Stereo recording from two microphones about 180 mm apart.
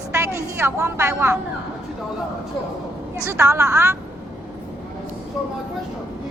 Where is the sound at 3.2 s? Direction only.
15° right (ahead or behind).